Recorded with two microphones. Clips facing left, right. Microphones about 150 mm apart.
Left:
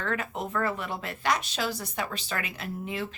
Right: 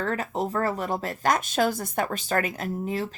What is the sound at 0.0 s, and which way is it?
Speech, 35° right (ahead or behind).